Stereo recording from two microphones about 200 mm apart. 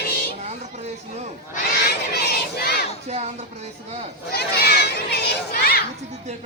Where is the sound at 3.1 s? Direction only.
35° right (ahead or behind).